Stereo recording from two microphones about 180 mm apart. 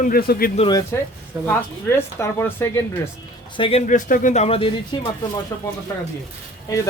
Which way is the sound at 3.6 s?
35° left (ahead or behind).